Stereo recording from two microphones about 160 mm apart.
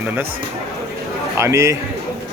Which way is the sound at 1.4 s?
15° right (ahead or behind).